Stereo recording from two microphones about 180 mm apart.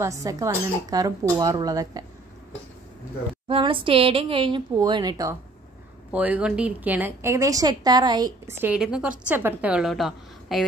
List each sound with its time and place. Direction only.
0.0 s a woman's voice: 20° right (ahead or behind)
3.4 s a woman's voice: 30° right (ahead or behind)
6.1 s a woman's voice: 10° right (ahead or behind)